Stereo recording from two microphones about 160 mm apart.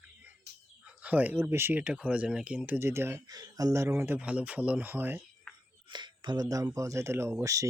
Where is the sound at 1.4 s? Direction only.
15° right (ahead or behind).